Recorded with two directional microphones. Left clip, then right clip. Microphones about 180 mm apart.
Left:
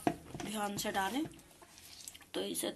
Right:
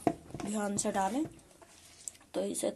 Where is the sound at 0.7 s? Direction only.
45° right (ahead or behind).